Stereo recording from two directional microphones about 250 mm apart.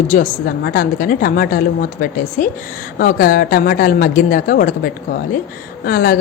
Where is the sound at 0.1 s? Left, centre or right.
Left.